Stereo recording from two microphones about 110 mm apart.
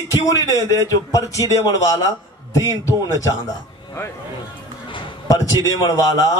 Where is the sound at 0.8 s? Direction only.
30° left (ahead or behind).